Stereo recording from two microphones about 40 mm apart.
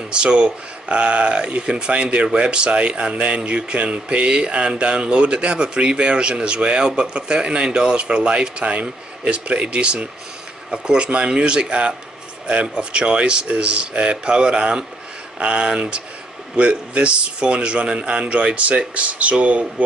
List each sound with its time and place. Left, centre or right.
0.1 s speech: right